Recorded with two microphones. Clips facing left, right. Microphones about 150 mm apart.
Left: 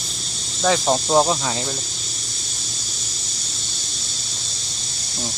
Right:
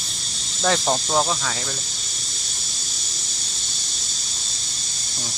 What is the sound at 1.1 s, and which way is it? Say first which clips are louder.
Speech: left 5 dB; 25° left (ahead or behind).